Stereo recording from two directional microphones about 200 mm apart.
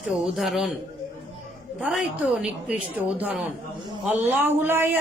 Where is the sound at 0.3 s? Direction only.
Centre (ahead or behind).